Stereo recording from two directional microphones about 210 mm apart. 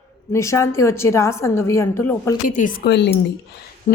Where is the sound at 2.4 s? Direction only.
40° left (ahead or behind); by 3.1 s 55° left (ahead or behind).